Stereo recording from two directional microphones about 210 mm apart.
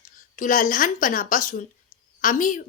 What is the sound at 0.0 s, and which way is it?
A woman's voice, 40° left (ahead or behind).